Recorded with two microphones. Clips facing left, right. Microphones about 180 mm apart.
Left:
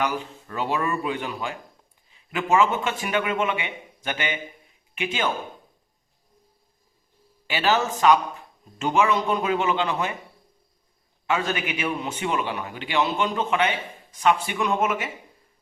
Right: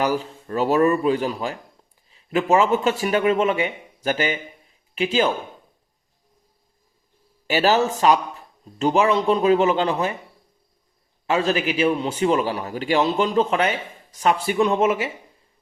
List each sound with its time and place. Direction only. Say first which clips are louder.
0.0 s a man's voice: right 5 dB; 35° right (ahead or behind)
7.4 s a man's voice: right 5 dB; 40° right (ahead or behind)
11.3 s a man's voice: right 5 dB; 30° right (ahead or behind)